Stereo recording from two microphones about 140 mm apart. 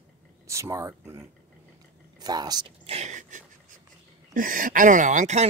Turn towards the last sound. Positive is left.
turn(degrees=-60)  # may be behind; listen again after turning